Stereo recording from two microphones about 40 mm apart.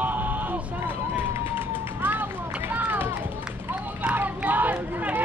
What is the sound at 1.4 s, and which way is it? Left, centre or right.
Run, right.